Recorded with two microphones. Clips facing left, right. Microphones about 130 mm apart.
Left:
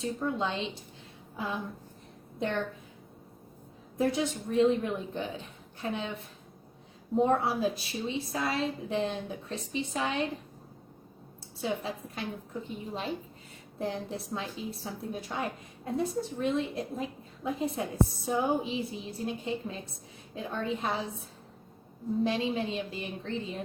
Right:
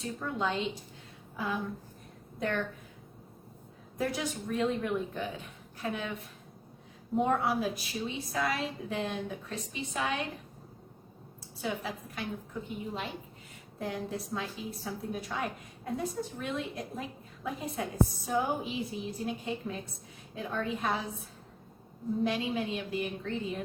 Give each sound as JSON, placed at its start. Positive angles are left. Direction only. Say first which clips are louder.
{"t": 0.0, "sound": "a woman's voice", "louder": "left 2 dB", "side_deg": 25}
{"t": 3.9, "sound": "a woman's voice", "louder": "left 4 dB", "side_deg": 25}
{"t": 7.4, "sound": "a woman's voice", "louder": "left 1 dB", "side_deg": 30}
{"t": 11.6, "sound": "a woman's voice", "louder": "left 2 dB", "side_deg": 25}